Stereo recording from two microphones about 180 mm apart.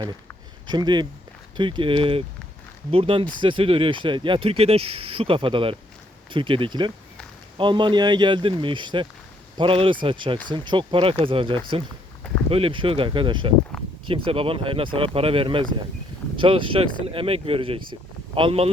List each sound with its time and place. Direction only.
0.7 s speech: 25° right (ahead or behind)